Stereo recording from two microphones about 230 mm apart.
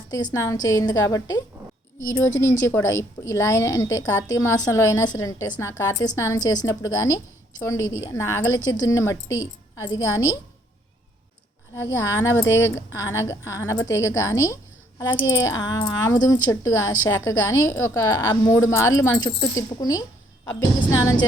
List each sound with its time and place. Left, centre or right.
0.3 s a woman's voice: centre
11.9 s a woman's voice: centre